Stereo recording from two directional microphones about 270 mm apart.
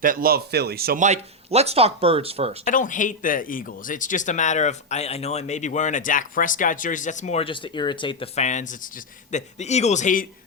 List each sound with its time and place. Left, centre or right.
0.0 s speech: right
2.6 s a man's voice: left